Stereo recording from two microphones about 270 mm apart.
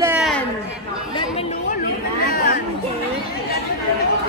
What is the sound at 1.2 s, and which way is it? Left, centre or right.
Chatter, left.